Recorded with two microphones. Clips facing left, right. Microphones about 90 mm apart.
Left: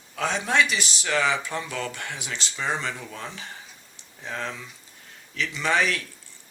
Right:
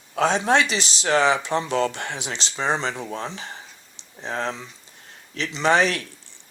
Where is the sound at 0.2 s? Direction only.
30° right (ahead or behind).